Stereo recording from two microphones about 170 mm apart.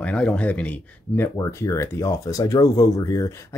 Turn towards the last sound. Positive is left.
turn(degrees=20)  # may be behind; listen again after turning